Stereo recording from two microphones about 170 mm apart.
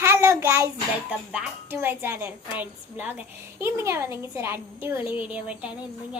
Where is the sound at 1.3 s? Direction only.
10° right (ahead or behind).